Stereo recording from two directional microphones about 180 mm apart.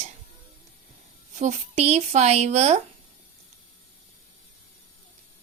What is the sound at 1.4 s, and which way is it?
Speech, 35° right (ahead or behind).